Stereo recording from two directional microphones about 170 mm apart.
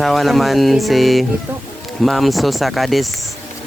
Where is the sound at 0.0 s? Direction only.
Centre (ahead or behind).